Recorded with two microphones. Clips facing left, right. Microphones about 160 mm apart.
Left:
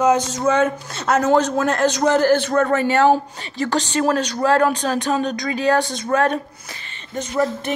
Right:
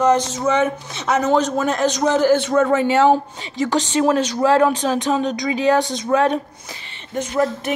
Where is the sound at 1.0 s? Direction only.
Centre (ahead or behind).